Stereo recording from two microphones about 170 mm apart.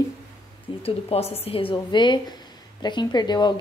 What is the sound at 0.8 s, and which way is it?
A woman's voice, 35° left (ahead or behind).